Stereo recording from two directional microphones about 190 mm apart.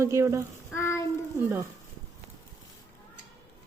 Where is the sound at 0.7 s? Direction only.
15° left (ahead or behind).